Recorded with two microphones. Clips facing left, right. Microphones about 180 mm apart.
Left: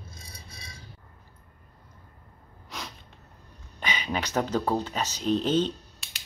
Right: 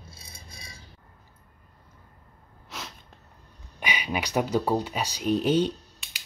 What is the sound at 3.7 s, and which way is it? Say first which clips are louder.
Speech: even; 10° right (ahead or behind).